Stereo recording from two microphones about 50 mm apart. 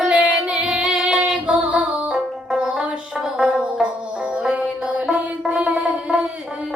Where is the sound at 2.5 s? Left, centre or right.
Centre.